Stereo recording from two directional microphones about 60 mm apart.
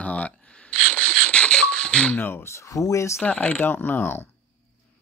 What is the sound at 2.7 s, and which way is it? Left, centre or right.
Speech, left.